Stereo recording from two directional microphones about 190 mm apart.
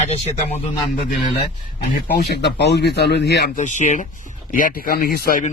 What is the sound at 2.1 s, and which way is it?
Speech, 60° left (ahead or behind).